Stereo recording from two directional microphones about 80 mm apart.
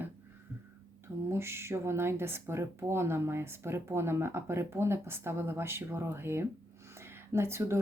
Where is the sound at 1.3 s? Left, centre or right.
Right.